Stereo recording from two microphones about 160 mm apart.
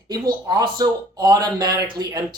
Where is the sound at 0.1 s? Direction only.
25° right (ahead or behind).